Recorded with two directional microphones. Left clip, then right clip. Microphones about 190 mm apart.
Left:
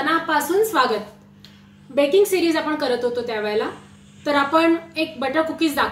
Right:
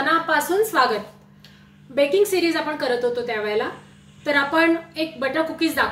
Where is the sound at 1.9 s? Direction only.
5° right (ahead or behind).